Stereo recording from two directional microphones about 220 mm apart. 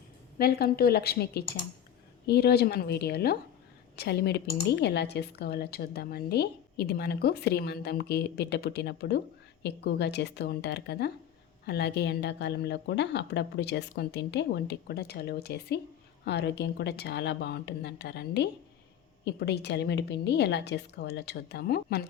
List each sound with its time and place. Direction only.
0.3 s a woman's voice: 45° left (ahead or behind)